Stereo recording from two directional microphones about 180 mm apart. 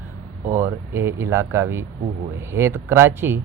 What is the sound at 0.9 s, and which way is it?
Speech, 15° right (ahead or behind).